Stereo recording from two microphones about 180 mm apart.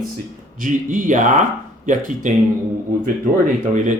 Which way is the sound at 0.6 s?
45° right (ahead or behind).